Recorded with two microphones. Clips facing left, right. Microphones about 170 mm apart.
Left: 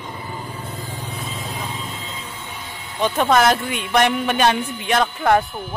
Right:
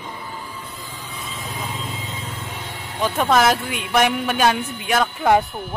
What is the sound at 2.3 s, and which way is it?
Vehicle, 80° right.